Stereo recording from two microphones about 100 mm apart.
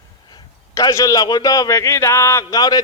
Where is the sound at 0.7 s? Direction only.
30° left (ahead or behind).